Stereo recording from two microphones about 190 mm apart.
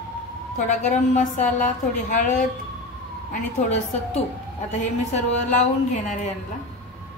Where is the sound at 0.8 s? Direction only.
40° left (ahead or behind).